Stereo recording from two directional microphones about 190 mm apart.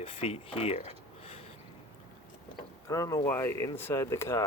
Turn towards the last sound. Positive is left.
turn(degrees=15)  # may be behind; listen again after turning